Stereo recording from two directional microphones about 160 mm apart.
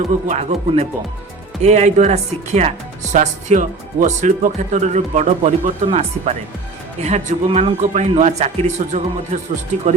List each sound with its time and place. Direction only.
0.3 s speech: 40° right (ahead or behind)